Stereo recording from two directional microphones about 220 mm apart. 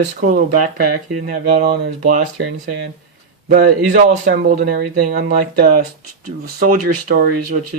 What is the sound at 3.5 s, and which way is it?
Speech, 35° right (ahead or behind).